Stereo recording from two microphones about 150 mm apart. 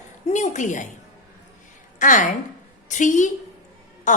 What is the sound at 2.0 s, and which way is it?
A woman's voice, 60° left (ahead or behind).